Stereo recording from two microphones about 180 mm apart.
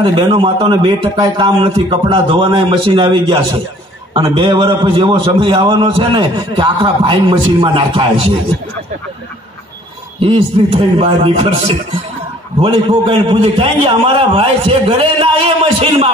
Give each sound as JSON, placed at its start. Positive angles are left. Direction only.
{"t": 0.0, "sound": "a man's voice", "side_deg": -30}
{"t": 10.2, "sound": "a man's voice", "side_deg": -30}